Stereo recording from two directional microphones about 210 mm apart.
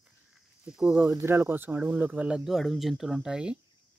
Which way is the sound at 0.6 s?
5° right (ahead or behind).